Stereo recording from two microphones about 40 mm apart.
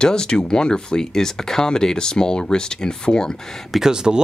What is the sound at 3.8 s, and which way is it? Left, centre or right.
Speech, centre.